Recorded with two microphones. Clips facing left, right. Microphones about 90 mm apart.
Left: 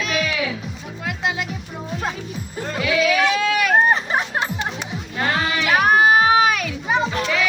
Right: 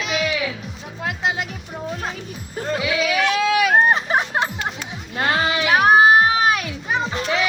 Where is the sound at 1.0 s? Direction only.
35° right (ahead or behind).